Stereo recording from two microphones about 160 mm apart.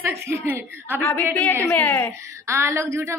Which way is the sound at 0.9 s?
15° left (ahead or behind).